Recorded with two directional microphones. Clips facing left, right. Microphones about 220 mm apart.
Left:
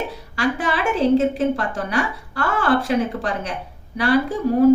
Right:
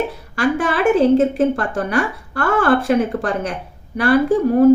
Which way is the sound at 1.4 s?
50° right (ahead or behind).